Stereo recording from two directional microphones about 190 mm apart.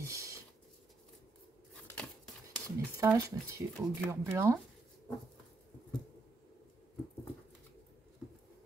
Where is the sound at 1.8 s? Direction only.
5° left (ahead or behind).